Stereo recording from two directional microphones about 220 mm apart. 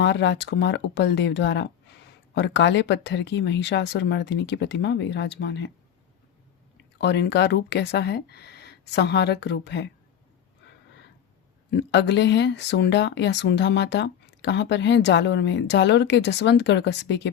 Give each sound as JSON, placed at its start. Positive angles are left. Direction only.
{"t": 0.0, "sound": "speech", "side_deg": 50}
{"t": 7.0, "sound": "speech", "side_deg": 50}
{"t": 11.7, "sound": "speech", "side_deg": 50}